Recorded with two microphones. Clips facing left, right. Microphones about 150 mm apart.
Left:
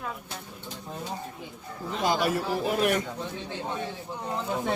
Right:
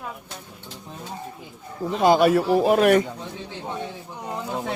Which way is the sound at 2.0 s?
65° right (ahead or behind).